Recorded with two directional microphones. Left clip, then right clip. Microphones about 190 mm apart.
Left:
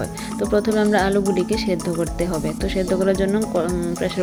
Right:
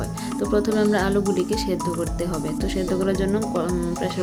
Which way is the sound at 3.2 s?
5° left (ahead or behind).